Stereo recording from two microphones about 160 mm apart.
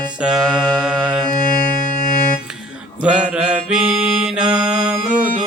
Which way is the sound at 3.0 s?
5° right (ahead or behind).